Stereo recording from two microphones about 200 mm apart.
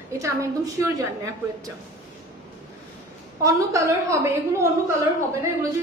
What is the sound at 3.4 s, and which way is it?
A woman's voice, 15° right (ahead or behind).